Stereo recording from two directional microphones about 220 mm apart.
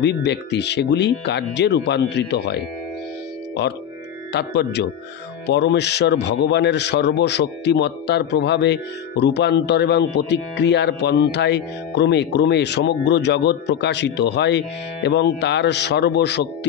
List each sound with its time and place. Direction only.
0.0 s speech: 50° left (ahead or behind)
4.3 s speech: 50° left (ahead or behind)